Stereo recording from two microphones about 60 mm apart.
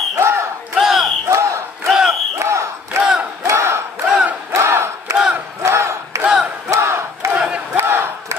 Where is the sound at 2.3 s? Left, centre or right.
Right.